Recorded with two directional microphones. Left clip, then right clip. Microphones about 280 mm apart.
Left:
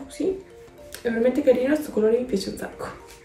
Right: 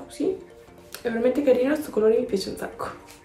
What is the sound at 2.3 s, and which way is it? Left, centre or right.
Speech, centre.